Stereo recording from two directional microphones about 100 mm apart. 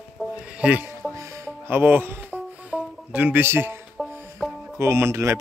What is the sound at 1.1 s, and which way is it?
Music, 25° right (ahead or behind).